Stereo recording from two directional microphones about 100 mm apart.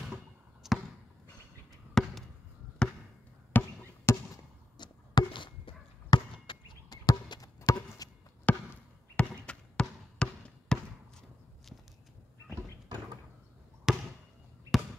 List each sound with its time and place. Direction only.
0.6 s basketball bounce: 5° right (ahead or behind)
2.0 s chop: 5° left (ahead or behind)
3.5 s a sound: 25° left (ahead or behind)
4.7 s chop: 45° left (ahead or behind)
7.1 s chop: 35° left (ahead or behind)
8.5 s basketball bounce: 15° left (ahead or behind)
12.6 s door: 45° right (ahead or behind)
13.9 s basketball bounce: 5° right (ahead or behind)